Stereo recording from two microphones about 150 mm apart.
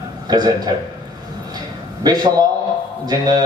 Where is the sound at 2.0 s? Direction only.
25° right (ahead or behind).